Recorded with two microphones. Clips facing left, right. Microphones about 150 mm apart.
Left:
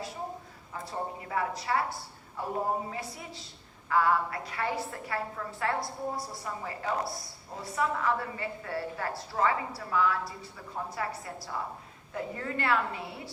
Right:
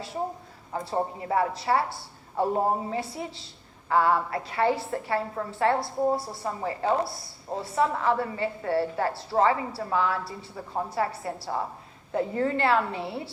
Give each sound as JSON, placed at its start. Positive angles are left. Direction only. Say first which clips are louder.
{"t": 0.7, "sound": "a woman's voice", "louder": "right 7 dB", "side_deg": -30}